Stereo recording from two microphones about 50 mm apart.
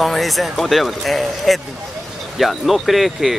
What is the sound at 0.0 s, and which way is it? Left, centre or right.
Speech, centre.